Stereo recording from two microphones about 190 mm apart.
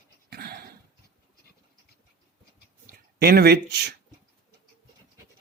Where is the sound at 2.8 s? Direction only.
55° right (ahead or behind).